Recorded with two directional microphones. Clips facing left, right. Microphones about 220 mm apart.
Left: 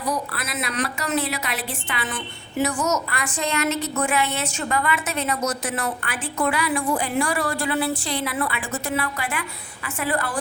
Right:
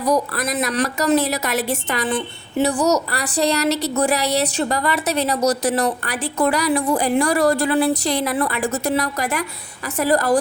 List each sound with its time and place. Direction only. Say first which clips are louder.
0.1 s a woman's voice: right 9 dB; 40° right (ahead or behind)
2.1 s a woman's voice: right 5 dB; 30° right (ahead or behind)